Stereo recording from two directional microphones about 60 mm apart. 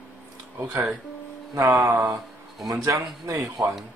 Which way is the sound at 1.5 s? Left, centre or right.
Right.